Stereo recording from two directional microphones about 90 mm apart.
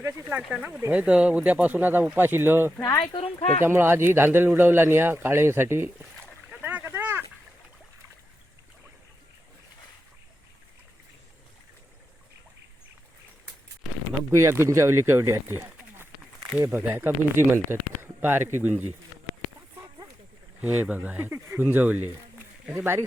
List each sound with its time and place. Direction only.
0.0 s speech: 30° right (ahead or behind)
0.4 s speech: 10° right (ahead or behind); by 2.7 s 25° right (ahead or behind)
3.1 s speech: 50° left (ahead or behind)
3.6 s speech: 25° right (ahead or behind)
6.5 s a sound: 20° right (ahead or behind)
14.3 s speech: 30° right (ahead or behind)
16.6 s speech: 25° right (ahead or behind)
20.6 s speech: 15° right (ahead or behind)